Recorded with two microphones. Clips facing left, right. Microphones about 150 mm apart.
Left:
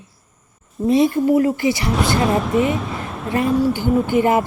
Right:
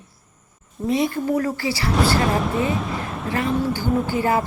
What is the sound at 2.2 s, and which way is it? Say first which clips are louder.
Speech: left 4 dB; centre (ahead or behind).